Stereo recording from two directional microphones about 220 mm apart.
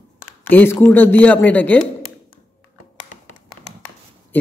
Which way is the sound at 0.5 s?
10° left (ahead or behind).